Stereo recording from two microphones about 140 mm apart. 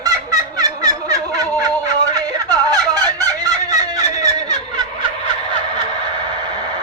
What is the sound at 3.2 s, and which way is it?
Fowl, 25° right (ahead or behind).